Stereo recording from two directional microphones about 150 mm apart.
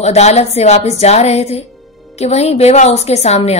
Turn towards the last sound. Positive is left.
turn(degrees=45)  # may be behind; listen again after turning